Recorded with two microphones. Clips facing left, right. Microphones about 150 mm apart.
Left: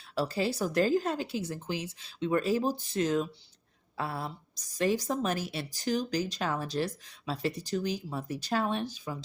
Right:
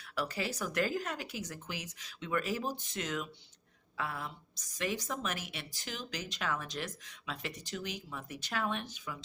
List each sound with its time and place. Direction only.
0.2 s a woman's voice: 30° left (ahead or behind)